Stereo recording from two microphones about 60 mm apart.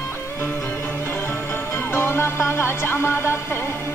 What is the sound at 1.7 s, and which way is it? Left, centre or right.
Music, left.